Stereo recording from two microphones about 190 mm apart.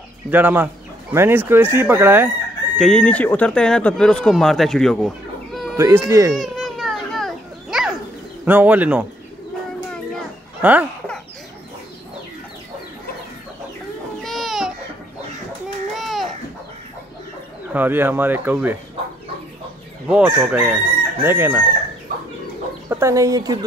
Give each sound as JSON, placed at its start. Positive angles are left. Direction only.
{"t": 0.3, "sound": "chicken", "side_deg": -10}
{"t": 2.8, "sound": "speech", "side_deg": 5}
{"t": 5.8, "sound": "chicken", "side_deg": -15}
{"t": 6.3, "sound": "children playing", "side_deg": 0}
{"t": 8.5, "sound": "chicken", "side_deg": -10}
{"t": 10.6, "sound": "speech", "side_deg": -10}
{"t": 14.2, "sound": "baby cry", "side_deg": 0}
{"t": 15.9, "sound": "baby cry", "side_deg": 0}
{"t": 17.7, "sound": "chicken", "side_deg": -10}
{"t": 20.1, "sound": "chicken", "side_deg": -5}
{"t": 22.8, "sound": "speech", "side_deg": -15}